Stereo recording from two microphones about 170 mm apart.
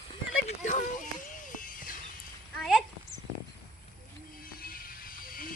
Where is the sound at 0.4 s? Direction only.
45° left (ahead or behind).